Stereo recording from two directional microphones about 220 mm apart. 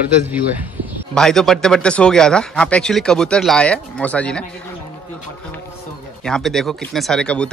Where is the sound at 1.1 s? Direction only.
Centre (ahead or behind).